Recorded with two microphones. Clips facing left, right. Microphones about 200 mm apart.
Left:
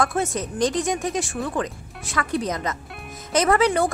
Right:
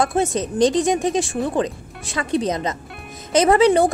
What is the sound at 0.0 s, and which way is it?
Speech, 25° right (ahead or behind).